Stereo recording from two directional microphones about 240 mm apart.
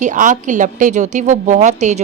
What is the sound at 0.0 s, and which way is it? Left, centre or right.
A woman's voice, right.